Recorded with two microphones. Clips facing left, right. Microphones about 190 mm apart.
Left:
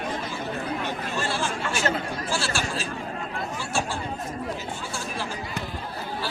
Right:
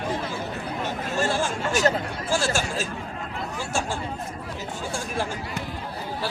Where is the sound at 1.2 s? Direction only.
45° right (ahead or behind).